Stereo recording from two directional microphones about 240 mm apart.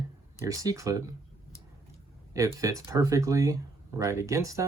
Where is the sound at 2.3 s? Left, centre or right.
Centre.